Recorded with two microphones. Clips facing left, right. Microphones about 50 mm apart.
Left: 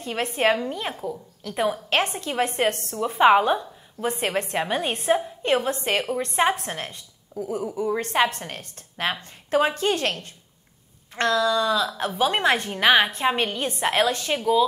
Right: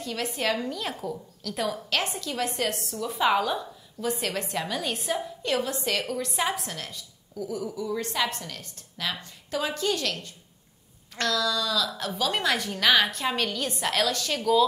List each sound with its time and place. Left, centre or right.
0.0 s a woman's voice: left